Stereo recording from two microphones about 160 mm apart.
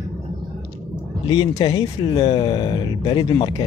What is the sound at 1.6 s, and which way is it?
Speech, 30° left (ahead or behind).